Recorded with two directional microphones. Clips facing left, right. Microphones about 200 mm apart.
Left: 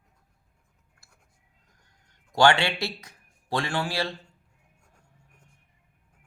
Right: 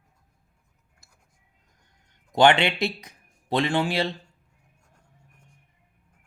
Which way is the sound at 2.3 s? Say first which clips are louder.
Right 2 dB; 20° right (ahead or behind).